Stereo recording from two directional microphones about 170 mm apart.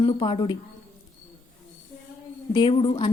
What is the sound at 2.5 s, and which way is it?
Speech, 30° left (ahead or behind).